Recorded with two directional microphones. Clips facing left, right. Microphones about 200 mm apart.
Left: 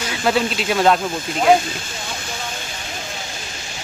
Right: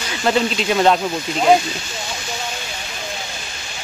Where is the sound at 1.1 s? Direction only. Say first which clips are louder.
Even; 50° left (ahead or behind).